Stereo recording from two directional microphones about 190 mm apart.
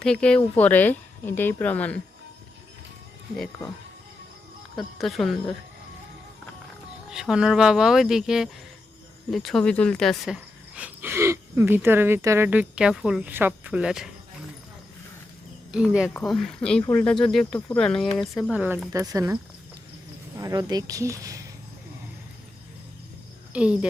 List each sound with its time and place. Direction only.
0.0 s speech: 5° left (ahead or behind)
4.9 s speech: centre (ahead or behind)
7.1 s speech: 5° right (ahead or behind)
15.7 s speech: 5° right (ahead or behind)
16.8 s speech: 10° left (ahead or behind)
18.5 s speech: 10° right (ahead or behind)
20.4 s speech: 20° right (ahead or behind)
23.5 s speech: 5° right (ahead or behind)